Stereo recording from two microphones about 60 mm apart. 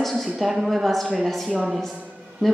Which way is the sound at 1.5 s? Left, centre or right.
Centre.